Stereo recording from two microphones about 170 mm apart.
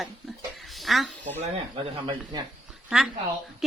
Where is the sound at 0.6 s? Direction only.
Centre (ahead or behind).